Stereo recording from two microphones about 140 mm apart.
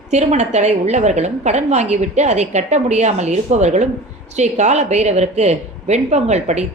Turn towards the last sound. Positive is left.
turn(degrees=-55)  # may be behind; listen again after turning